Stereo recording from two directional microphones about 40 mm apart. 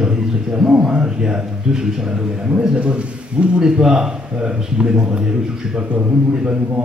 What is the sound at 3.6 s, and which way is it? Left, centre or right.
A man's voice, centre.